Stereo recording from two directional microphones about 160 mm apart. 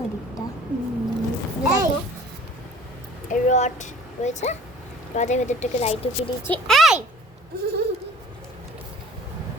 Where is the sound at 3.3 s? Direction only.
45° left (ahead or behind).